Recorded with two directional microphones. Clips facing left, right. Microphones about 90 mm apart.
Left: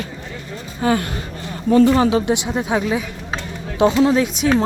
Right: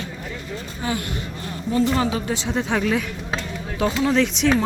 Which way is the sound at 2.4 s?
10° left (ahead or behind).